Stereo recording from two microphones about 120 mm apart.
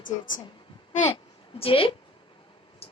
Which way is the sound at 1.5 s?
50° left (ahead or behind).